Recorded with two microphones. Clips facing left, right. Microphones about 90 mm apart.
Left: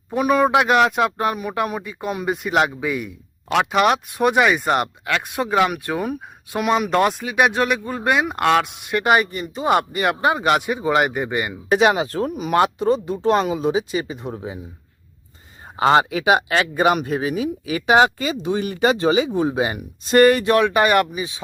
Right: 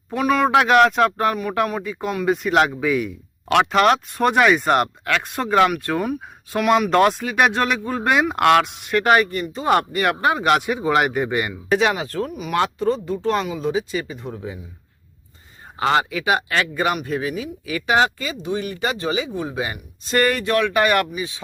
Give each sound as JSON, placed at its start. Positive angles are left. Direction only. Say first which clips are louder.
{"t": 0.1, "sound": "speech", "louder": "left 1 dB", "side_deg": 15}
{"t": 0.5, "sound": "speech", "louder": "right 2 dB", "side_deg": 5}
{"t": 1.8, "sound": "speech", "louder": "right 2 dB", "side_deg": 5}
{"t": 6.6, "sound": "speech", "louder": "right 2 dB", "side_deg": 15}
{"t": 6.9, "sound": "speech", "louder": "right 2 dB", "side_deg": 5}
{"t": 11.7, "sound": "speech", "louder": "left 3 dB", "side_deg": 15}
{"t": 12.5, "sound": "speech", "louder": "left 3 dB", "side_deg": 15}
{"t": 15.9, "sound": "speech", "louder": "left 4 dB", "side_deg": 25}